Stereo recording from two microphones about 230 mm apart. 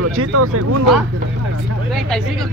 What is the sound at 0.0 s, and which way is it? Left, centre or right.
Speech, right.